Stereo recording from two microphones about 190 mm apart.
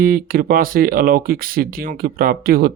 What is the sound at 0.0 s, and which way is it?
Speech, 50° right (ahead or behind).